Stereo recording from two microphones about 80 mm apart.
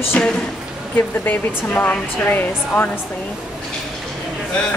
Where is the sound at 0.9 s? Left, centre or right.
Left.